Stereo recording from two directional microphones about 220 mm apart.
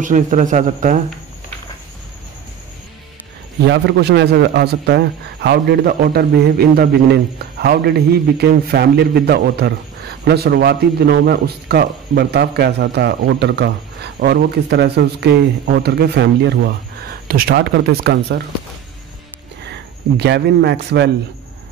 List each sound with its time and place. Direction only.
0.0 s speech: 35° right (ahead or behind)
3.6 s a man's voice: 50° right (ahead or behind)
19.6 s speech: 50° right (ahead or behind)